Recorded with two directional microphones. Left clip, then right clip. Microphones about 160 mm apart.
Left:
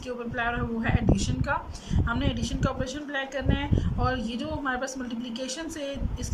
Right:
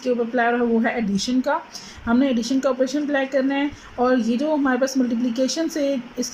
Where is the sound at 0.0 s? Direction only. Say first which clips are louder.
Right 10 dB; 50° right (ahead or behind).